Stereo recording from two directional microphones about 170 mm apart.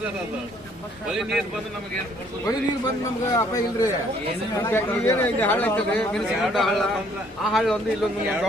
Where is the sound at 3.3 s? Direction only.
20° left (ahead or behind).